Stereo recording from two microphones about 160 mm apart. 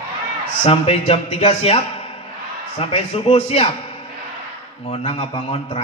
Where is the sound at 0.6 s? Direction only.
35° left (ahead or behind).